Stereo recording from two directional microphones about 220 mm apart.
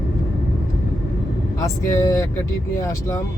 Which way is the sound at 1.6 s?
15° left (ahead or behind).